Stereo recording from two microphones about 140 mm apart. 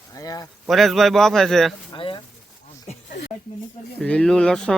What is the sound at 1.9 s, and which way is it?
Speech, 35° left (ahead or behind).